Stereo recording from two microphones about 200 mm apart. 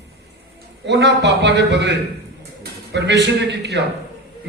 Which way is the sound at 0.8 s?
60° right (ahead or behind).